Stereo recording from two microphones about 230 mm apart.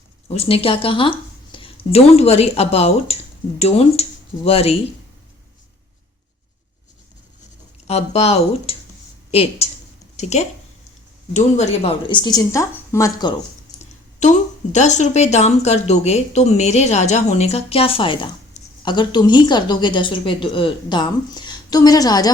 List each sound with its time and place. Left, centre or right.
0.3 s speech: left
7.9 s speech: left
14.2 s speech: left